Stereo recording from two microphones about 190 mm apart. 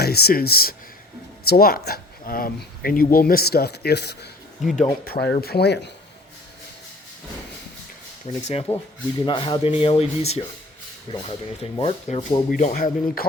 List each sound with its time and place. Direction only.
0.0 s speech: 55° left (ahead or behind)
4.6 s speech: centre (ahead or behind)
5.0 s speech: 55° left (ahead or behind)
8.3 s speech: 35° left (ahead or behind)